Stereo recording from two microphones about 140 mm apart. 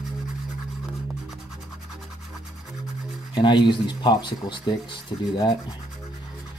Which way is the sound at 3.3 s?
35° left (ahead or behind).